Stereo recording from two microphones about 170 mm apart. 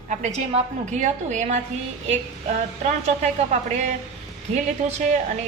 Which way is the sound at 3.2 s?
40° right (ahead or behind).